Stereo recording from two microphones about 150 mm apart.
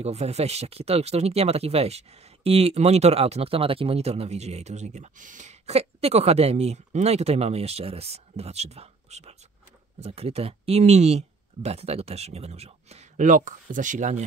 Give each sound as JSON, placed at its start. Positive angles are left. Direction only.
{"t": 0.0, "sound": "speech", "side_deg": -45}